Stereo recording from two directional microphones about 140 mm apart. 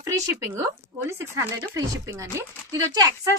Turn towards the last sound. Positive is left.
turn(degrees=-25)  # may be behind; listen again after turning